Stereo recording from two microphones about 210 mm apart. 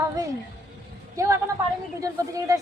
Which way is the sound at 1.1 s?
15° right (ahead or behind).